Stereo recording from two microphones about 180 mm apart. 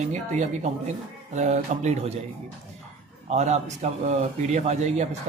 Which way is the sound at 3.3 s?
40° right (ahead or behind).